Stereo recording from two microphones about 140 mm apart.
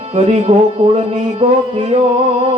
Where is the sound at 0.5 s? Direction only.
45° right (ahead or behind).